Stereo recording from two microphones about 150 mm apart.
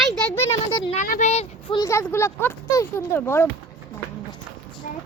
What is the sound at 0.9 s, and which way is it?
Speech, 70° left (ahead or behind).